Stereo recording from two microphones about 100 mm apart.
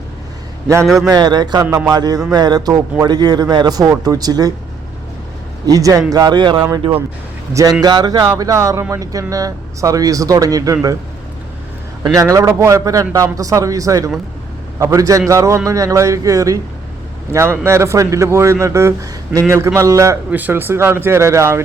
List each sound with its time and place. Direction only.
1.0 s speech: 40° right (ahead or behind)
5.6 s speech: 35° right (ahead or behind)
7.8 s speech: 45° right (ahead or behind)
8.4 s speech: 35° right (ahead or behind)
12.0 s a man's voice: 35° right (ahead or behind)
20.3 s a man's voice: 20° right (ahead or behind)